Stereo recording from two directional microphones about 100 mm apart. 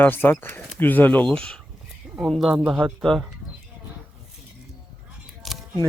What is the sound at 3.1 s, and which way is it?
Speech, 5° left (ahead or behind).